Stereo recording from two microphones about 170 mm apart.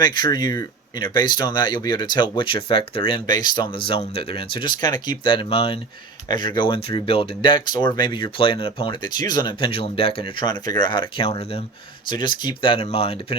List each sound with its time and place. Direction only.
0.0 s speech: 25° left (ahead or behind)